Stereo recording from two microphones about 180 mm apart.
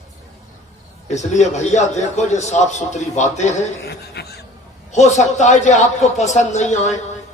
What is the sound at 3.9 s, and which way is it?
Speech, 65° left (ahead or behind).